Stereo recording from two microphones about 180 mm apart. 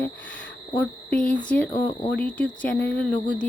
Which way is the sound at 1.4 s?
5° left (ahead or behind).